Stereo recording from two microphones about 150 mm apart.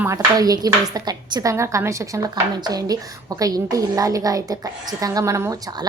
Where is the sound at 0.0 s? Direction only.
20° right (ahead or behind).